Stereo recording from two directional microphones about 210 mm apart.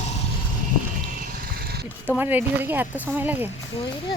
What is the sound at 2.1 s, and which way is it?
Speech, 10° right (ahead or behind).